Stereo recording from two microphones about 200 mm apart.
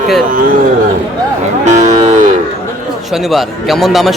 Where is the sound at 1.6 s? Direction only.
35° right (ahead or behind).